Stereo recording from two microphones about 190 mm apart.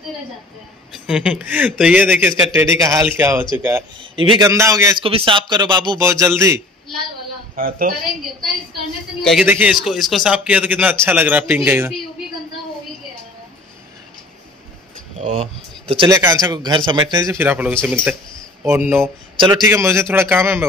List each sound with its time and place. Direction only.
0.9 s speech: 5° right (ahead or behind)
4.0 s a man's voice: 30° right (ahead or behind)
4.5 s speech: 15° right (ahead or behind)
5.0 s a man's voice: 30° right (ahead or behind)
7.5 s a man's voice: 50° right (ahead or behind)
9.2 s a man's voice: centre (ahead or behind)
15.1 s speech: 40° right (ahead or behind)
16.1 s speech: 15° right (ahead or behind)
19.3 s a man's voice: 25° right (ahead or behind)
19.7 s speech: 15° right (ahead or behind)